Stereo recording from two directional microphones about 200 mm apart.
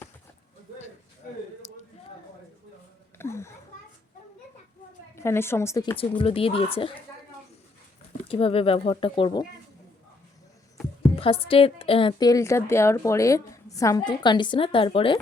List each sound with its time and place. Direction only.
1.6 s a sound: 35° left (ahead or behind)
3.2 s children playing: 15° left (ahead or behind)
5.1 s a woman's voice: 15° left (ahead or behind)
8.3 s a woman's voice: 30° left (ahead or behind)
11.2 s a woman's voice: 30° left (ahead or behind)